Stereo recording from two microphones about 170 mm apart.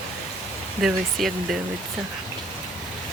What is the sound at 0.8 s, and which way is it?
Speech, centre (ahead or behind).